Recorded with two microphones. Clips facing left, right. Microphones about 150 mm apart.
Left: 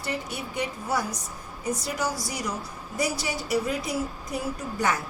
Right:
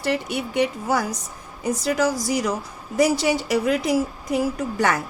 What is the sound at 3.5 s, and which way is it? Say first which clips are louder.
A woman's voice: right 6 dB; 80° right.